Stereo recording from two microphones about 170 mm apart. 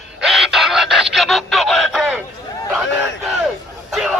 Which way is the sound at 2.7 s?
5° right (ahead or behind).